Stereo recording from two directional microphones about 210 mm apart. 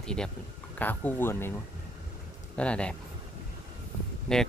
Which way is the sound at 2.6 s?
5° left (ahead or behind).